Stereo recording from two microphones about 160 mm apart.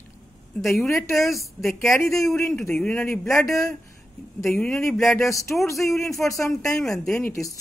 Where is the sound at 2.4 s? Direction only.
15° left (ahead or behind).